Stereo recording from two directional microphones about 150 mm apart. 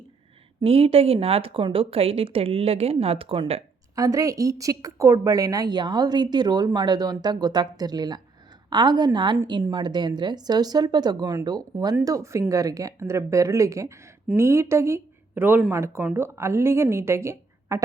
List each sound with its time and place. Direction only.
0.6 s a woman's voice: 40° right (ahead or behind)
3.9 s a woman's voice: 25° right (ahead or behind)